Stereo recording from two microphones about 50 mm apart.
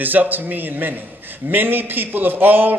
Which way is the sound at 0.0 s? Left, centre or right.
Right.